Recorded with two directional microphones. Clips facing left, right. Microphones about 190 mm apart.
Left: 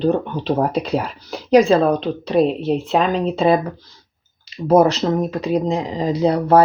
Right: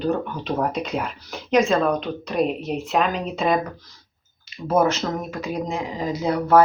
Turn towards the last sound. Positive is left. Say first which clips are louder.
# left 4 dB
turn(degrees=35)  # may be behind; listen again after turning